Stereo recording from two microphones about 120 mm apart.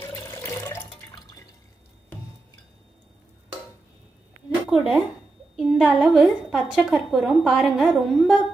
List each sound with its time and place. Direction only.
0.0 s water: 30° left (ahead or behind)
4.6 s a woman's voice: 5° right (ahead or behind)